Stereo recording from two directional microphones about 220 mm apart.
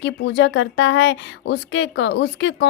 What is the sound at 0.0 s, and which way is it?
A woman's voice, 55° left (ahead or behind).